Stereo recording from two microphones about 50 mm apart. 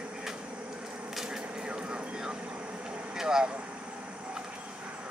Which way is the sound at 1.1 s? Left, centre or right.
Centre.